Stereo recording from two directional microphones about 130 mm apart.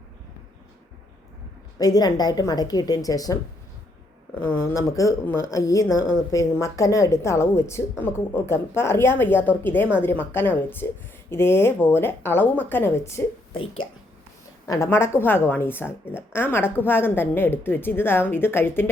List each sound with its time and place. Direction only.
1.8 s a woman's voice: 30° left (ahead or behind)
4.4 s a woman's voice: 20° left (ahead or behind)
14.7 s a woman's voice: 20° left (ahead or behind)